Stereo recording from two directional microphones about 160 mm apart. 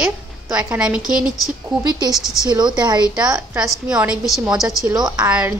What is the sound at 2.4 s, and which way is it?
Speech, 25° right (ahead or behind).